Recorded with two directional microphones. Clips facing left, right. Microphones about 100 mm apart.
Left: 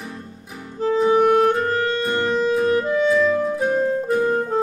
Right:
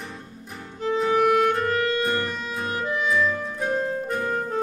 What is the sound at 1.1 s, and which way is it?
Music, 35° left (ahead or behind).